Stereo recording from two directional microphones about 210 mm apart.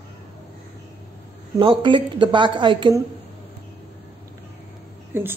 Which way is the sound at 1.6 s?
25° right (ahead or behind).